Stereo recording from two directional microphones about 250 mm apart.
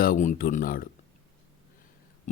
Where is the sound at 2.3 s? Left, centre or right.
Left.